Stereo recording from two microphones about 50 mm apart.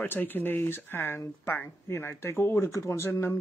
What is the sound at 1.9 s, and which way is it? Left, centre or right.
Speech, left.